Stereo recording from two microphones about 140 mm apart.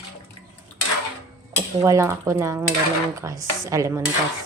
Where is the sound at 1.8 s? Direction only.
20° right (ahead or behind).